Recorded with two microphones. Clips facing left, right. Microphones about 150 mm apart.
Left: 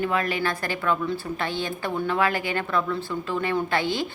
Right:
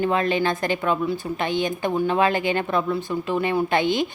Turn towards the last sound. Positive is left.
turn(degrees=-20)  # may be behind; listen again after turning